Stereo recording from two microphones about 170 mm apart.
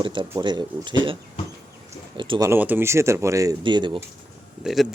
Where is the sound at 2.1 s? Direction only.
30° right (ahead or behind).